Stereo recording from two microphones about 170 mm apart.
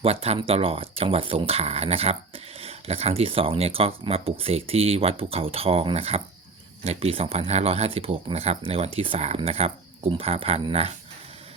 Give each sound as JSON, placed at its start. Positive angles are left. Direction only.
{"t": 0.0, "sound": "speech", "side_deg": -35}